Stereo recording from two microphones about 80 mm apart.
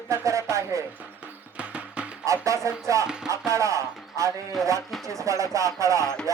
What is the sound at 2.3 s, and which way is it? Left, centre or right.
Music, right.